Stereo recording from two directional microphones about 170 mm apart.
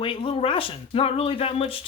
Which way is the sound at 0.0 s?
30° left (ahead or behind).